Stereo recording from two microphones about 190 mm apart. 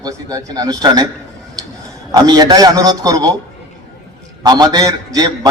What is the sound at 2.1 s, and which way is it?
A man's voice, 20° right (ahead or behind).